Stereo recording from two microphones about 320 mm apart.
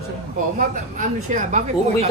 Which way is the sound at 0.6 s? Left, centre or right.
Right.